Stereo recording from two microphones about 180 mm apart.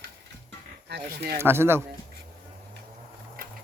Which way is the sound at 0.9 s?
65° right (ahead or behind).